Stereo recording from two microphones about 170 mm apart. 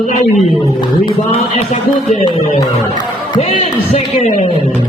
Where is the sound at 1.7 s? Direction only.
40° left (ahead or behind).